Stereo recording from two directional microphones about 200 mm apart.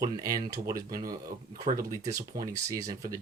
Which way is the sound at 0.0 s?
15° right (ahead or behind).